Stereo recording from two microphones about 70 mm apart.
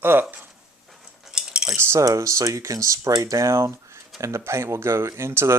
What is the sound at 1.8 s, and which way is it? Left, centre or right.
Speech, right.